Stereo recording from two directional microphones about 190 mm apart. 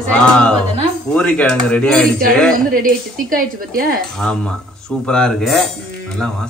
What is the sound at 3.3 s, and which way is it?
Speech, 45° right (ahead or behind).